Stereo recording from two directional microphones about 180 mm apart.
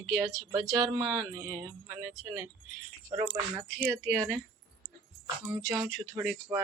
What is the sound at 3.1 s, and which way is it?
Speech, 15° right (ahead or behind).